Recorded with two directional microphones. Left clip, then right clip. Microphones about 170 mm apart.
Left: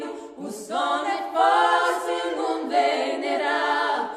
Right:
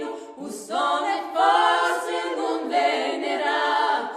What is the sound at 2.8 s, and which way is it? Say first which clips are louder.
A capella: even; 25° right (ahead or behind).